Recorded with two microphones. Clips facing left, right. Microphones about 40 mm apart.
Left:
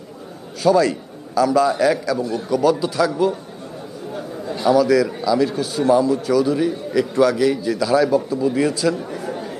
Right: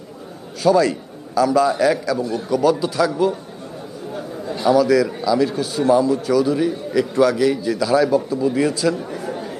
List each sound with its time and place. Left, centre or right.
0.6 s a man's voice: centre